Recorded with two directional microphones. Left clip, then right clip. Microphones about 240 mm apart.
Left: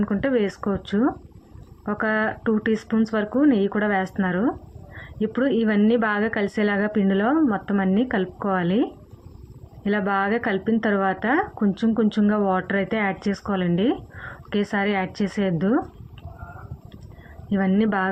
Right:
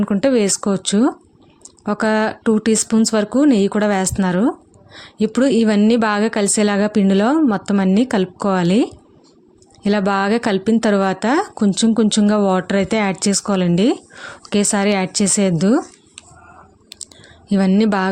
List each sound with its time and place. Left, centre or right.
0.0 s speech: right
17.5 s speech: right